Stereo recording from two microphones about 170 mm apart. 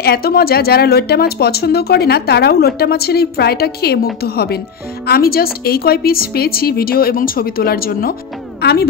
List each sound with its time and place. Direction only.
0.0 s a woman's voice: 65° left (ahead or behind)